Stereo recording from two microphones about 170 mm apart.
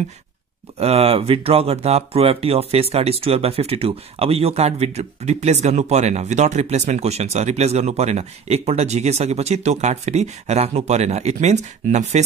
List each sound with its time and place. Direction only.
0.7 s speech: 35° right (ahead or behind)